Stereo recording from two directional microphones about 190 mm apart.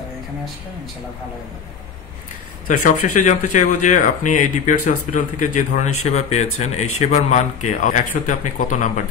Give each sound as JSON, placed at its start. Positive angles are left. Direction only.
{"t": 2.8, "sound": "speech", "side_deg": 40}